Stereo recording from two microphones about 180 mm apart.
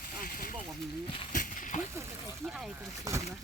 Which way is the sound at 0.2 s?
50° left (ahead or behind).